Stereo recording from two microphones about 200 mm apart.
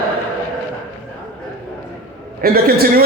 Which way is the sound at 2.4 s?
50° right (ahead or behind).